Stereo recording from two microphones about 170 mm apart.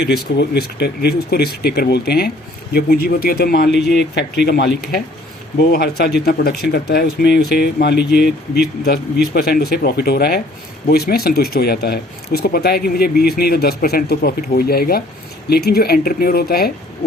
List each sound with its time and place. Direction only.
0.1 s speech: 75° left (ahead or behind)
9.3 s speech: 65° left (ahead or behind)